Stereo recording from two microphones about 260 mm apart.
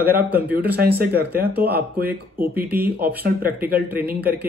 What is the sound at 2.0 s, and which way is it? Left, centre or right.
Speech, centre.